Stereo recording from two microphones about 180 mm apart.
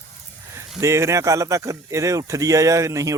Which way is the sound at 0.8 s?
15° right (ahead or behind).